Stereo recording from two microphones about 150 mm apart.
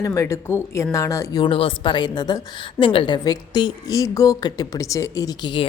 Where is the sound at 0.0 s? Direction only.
20° left (ahead or behind).